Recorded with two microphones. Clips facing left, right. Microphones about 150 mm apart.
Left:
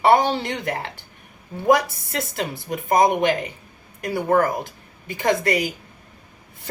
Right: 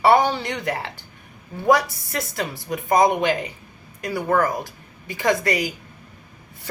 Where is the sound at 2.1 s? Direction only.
20° left (ahead or behind).